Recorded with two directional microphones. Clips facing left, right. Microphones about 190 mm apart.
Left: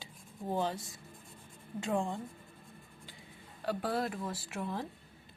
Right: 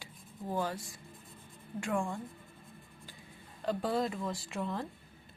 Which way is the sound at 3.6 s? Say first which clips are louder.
Right 2 dB; 5° left (ahead or behind).